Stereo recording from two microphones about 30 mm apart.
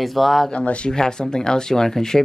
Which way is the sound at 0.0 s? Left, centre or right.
Centre.